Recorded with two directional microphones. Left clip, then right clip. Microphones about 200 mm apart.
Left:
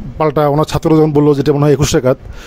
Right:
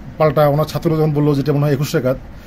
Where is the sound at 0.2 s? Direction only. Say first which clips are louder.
Left 2 dB; 55° left (ahead or behind).